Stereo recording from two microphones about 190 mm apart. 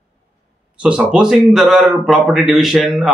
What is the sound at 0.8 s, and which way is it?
Speech, 5° right (ahead or behind).